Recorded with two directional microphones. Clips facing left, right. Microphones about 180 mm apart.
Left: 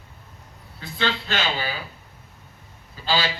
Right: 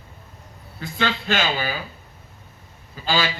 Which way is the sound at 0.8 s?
50° right (ahead or behind).